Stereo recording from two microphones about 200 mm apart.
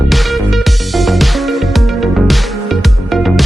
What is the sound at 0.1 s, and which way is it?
Music, centre (ahead or behind).